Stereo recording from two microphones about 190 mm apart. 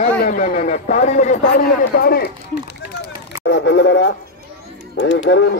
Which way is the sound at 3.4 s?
65° left (ahead or behind).